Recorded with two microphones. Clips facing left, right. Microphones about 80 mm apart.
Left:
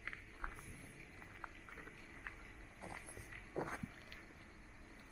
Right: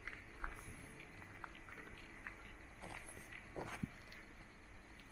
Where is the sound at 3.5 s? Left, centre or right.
Left.